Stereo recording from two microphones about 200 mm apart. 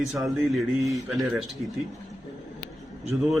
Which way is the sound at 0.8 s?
15° right (ahead or behind).